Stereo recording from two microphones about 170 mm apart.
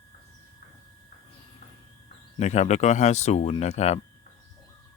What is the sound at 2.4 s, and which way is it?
Speech, 40° left (ahead or behind).